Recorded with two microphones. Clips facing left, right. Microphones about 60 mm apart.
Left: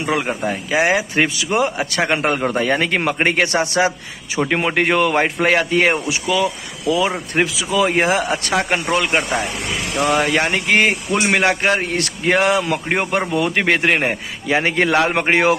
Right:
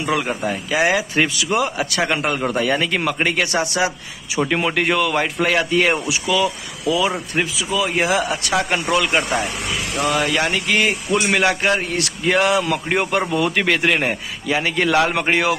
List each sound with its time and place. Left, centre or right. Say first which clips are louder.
0.0 s speech: left 1 dB; left
7.5 s speech: left 4 dB; left
9.9 s speech: left 3 dB; left
11.1 s speech: left 1 dB; centre
11.3 s speech: left 2 dB; left